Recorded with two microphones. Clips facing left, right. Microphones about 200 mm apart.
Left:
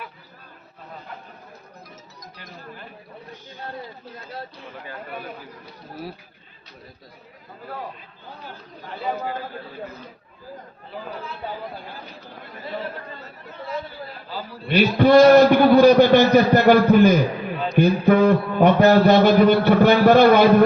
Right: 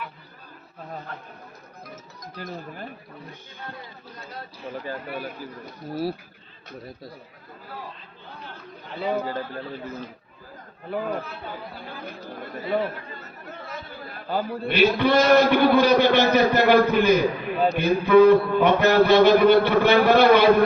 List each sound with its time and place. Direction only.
10.9 s speech: 50° right (ahead or behind)
14.3 s speech: 55° right (ahead or behind)
14.8 s a man's voice: 45° left (ahead or behind)